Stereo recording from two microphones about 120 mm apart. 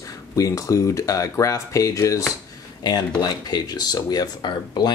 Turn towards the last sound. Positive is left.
turn(degrees=40)  # may be behind; listen again after turning